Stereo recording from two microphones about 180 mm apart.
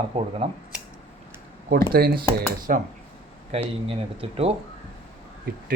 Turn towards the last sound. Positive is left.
turn(degrees=-55)  # may be behind; listen again after turning